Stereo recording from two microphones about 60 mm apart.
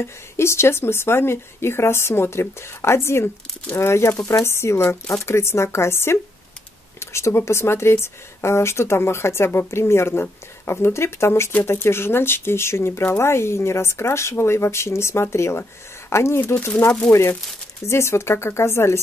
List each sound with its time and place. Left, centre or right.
0.0 s speech: left